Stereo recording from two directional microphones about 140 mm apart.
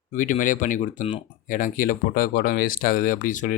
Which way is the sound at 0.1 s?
70° left (ahead or behind).